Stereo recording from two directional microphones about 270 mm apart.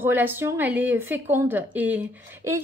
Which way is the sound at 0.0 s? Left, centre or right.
Centre.